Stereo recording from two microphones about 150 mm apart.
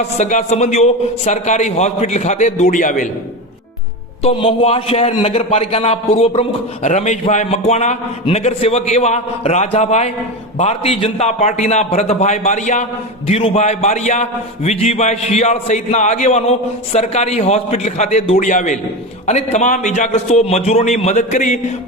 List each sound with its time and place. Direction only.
0.2 s a man's voice: 50° left (ahead or behind)
4.2 s a man's voice: 40° left (ahead or behind)